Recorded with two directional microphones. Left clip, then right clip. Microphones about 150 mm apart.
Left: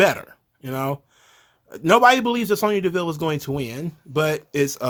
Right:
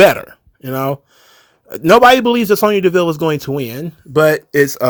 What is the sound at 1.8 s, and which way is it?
Speech, 40° right (ahead or behind).